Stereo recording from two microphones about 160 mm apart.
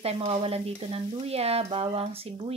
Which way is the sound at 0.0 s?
40° right (ahead or behind).